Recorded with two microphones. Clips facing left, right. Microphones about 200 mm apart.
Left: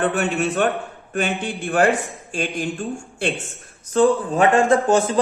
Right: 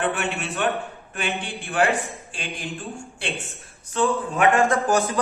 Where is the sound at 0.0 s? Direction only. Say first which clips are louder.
Left 5 dB; 40° left (ahead or behind).